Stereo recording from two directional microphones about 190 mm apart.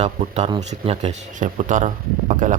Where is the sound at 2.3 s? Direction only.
45° right (ahead or behind).